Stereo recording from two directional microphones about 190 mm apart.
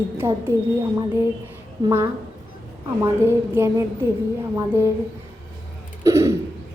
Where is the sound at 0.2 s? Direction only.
10° right (ahead or behind).